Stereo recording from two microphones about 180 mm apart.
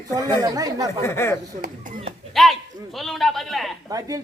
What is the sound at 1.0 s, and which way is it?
Speech, 15° left (ahead or behind).